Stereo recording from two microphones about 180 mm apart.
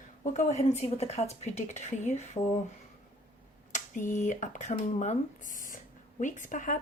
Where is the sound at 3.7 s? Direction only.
45° left (ahead or behind).